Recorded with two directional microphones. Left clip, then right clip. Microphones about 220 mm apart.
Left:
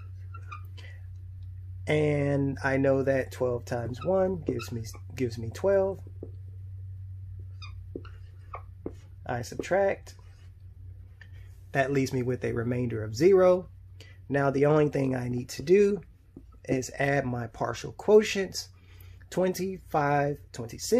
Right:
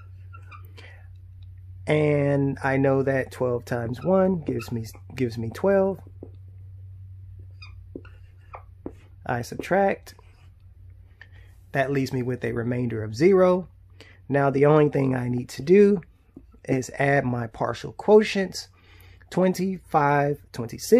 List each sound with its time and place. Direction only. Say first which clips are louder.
0.7 s whispering: right 3 dB; 30° right (ahead or behind)
1.9 s speech: right 5 dB; 20° right (ahead or behind)
9.2 s speech: right 5 dB; 30° right (ahead or behind)
11.1 s speech: right 5 dB; 15° right (ahead or behind)